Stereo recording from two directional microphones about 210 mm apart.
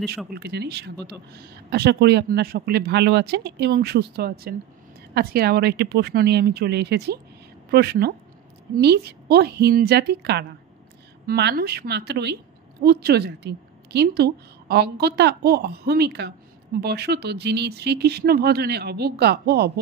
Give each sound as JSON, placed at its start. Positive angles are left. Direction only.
{"t": 0.3, "sound": "a woman's voice", "side_deg": -50}